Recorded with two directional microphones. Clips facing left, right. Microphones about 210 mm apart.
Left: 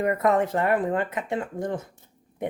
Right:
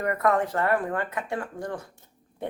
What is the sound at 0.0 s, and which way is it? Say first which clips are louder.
Speech: left 2 dB; 20° left (ahead or behind).